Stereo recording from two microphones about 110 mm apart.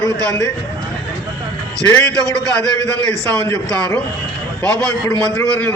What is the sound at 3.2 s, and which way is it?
Speech, 35° right (ahead or behind).